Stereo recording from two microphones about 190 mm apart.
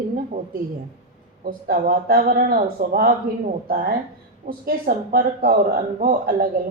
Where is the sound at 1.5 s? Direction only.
50° right (ahead or behind).